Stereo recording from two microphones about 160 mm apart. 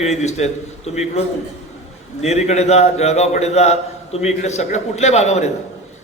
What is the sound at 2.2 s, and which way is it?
A man's voice, 45° left (ahead or behind).